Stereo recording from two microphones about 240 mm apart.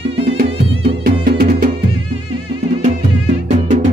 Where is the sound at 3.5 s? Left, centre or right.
Right.